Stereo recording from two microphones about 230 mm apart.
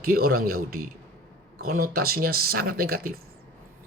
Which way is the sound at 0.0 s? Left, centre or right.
Right.